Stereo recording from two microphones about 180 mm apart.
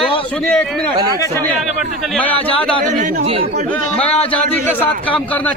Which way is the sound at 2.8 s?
45° right (ahead or behind).